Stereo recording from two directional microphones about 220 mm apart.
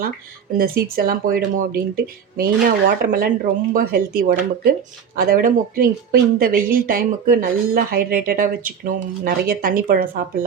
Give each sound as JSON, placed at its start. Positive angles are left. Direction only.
{"t": 0.5, "sound": "speech", "side_deg": -45}
{"t": 3.0, "sound": "speech", "side_deg": -40}